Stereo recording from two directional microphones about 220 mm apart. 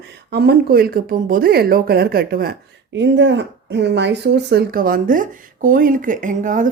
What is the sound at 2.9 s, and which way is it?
Speech, 55° right (ahead or behind).